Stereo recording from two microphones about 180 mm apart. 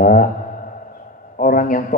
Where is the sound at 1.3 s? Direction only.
50° left (ahead or behind).